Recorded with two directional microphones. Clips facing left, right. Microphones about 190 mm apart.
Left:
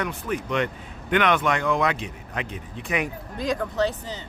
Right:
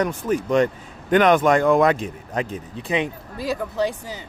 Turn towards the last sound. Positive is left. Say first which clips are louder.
# right 1 dB
turn(degrees=-10)  # may be behind; listen again after turning